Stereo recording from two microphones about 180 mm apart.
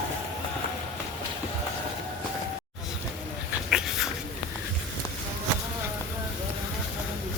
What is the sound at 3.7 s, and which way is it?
Dog, centre (ahead or behind).